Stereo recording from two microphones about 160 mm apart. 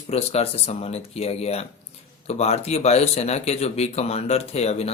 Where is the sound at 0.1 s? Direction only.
40° left (ahead or behind).